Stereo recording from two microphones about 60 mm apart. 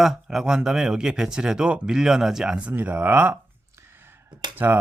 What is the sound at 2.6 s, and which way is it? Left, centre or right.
Speech, right.